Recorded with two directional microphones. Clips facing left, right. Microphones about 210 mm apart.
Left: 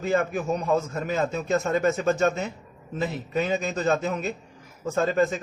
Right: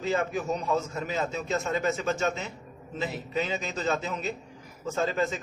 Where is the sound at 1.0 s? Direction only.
50° left (ahead or behind).